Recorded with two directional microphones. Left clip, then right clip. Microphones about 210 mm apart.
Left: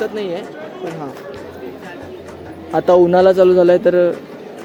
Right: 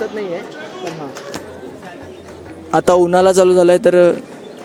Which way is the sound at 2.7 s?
30° right (ahead or behind).